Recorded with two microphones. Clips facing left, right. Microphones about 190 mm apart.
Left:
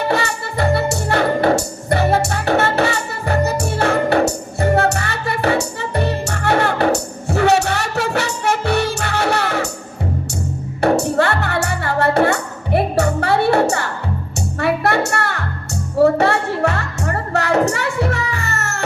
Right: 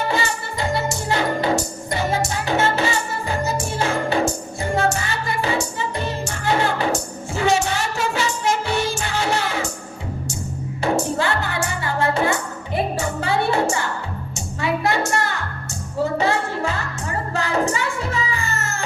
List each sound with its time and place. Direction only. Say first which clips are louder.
0.1 s music: left 4 dB; 65° left (ahead or behind)
10.8 s music: left 6 dB; 65° left (ahead or behind)